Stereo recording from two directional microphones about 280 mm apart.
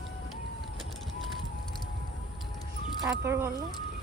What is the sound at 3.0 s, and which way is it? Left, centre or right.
Speech, centre.